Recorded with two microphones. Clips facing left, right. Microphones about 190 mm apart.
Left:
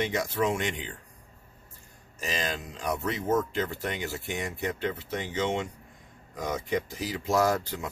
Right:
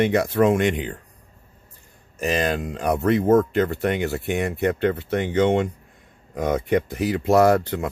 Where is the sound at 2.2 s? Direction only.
60° right (ahead or behind).